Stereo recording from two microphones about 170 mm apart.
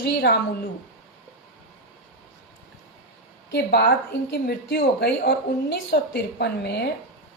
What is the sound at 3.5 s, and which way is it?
A woman's voice, 75° left (ahead or behind).